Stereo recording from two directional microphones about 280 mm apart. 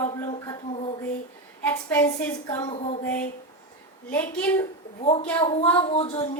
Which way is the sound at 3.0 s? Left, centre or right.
Centre.